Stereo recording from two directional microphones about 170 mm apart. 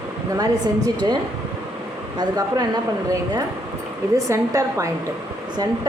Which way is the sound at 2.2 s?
20° right (ahead or behind).